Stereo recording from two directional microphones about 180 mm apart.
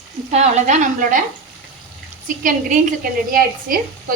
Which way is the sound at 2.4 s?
45° right (ahead or behind).